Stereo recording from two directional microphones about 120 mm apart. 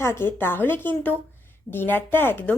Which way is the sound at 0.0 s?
20° left (ahead or behind).